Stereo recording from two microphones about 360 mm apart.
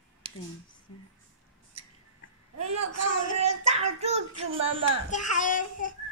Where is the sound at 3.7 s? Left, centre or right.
Centre.